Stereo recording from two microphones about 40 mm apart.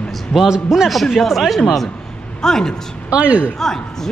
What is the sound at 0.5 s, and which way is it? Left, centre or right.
Speech, centre.